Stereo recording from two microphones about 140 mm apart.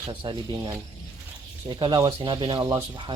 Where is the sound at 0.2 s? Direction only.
30° right (ahead or behind).